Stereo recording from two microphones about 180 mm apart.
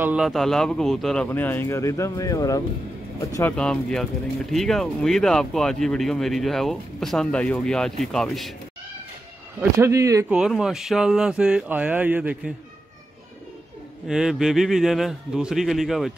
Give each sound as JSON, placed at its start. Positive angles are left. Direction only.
{"t": 0.0, "sound": "a man's voice", "side_deg": -5}
{"t": 3.5, "sound": "speech", "side_deg": 5}
{"t": 9.6, "sound": "speech", "side_deg": -15}
{"t": 10.3, "sound": "speech", "side_deg": -5}
{"t": 14.0, "sound": "speech", "side_deg": -5}